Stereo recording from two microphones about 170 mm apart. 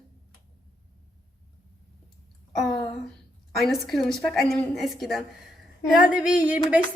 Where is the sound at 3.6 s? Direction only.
Centre (ahead or behind).